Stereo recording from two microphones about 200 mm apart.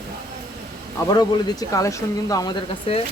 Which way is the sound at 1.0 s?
15° left (ahead or behind).